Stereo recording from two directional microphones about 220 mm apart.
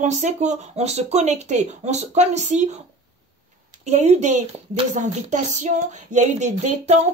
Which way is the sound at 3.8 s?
30° right (ahead or behind).